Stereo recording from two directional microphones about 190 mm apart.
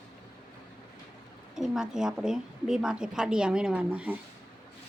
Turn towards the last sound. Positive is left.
turn(degrees=-5)  # may be behind; listen again after turning